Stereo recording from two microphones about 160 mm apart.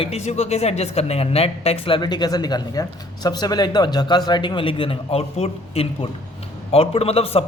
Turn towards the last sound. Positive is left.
turn(degrees=40)  # may be behind; listen again after turning